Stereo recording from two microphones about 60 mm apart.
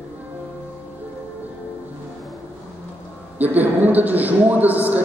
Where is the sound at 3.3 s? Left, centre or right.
Right.